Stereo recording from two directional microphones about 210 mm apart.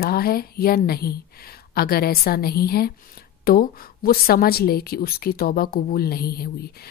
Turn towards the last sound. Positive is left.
turn(degrees=45)  # may be behind; listen again after turning